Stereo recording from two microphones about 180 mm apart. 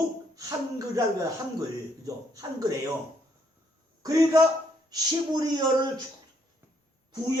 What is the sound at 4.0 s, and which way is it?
Speech, 20° right (ahead or behind).